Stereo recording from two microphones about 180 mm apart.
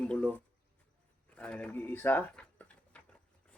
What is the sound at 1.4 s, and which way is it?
Speech, 5° left (ahead or behind).